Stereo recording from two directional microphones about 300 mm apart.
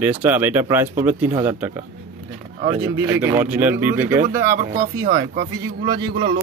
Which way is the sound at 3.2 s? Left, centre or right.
Centre.